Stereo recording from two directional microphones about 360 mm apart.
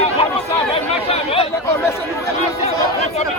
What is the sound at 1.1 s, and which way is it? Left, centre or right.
Chatter, centre.